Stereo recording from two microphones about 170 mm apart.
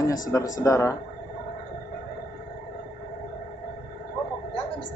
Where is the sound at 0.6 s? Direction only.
20° left (ahead or behind).